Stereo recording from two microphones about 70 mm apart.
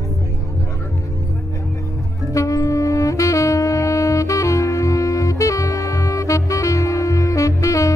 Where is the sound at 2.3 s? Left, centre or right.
Left.